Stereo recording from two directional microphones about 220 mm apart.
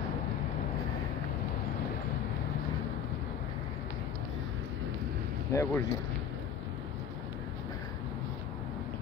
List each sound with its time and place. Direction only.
5.5 s speech: 10° left (ahead or behind)